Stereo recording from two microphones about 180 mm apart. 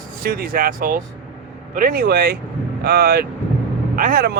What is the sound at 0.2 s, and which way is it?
Speech, 55° right (ahead or behind).